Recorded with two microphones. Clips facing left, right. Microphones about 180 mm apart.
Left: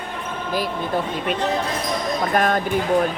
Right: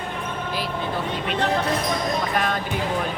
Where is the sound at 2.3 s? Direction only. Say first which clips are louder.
Left 9 dB; 45° left (ahead or behind).